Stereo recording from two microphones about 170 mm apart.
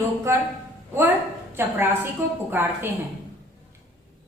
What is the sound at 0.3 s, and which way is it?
Speech, 15° right (ahead or behind).